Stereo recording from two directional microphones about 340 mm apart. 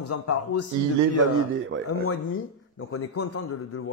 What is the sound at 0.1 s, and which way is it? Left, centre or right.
Speech, left.